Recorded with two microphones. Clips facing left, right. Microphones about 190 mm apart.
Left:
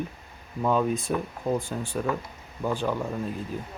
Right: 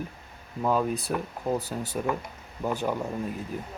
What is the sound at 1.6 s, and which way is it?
Speech, 40° right (ahead or behind).